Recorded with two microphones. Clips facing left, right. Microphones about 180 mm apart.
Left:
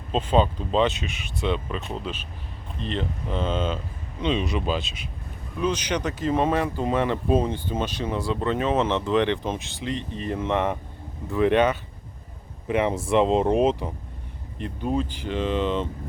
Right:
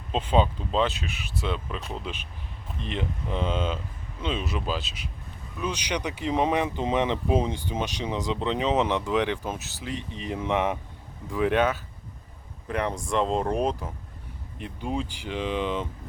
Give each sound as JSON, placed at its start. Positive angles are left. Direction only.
{"t": 0.1, "sound": "speech", "side_deg": -10}
{"t": 2.8, "sound": "speech", "side_deg": -10}
{"t": 14.6, "sound": "speech", "side_deg": -10}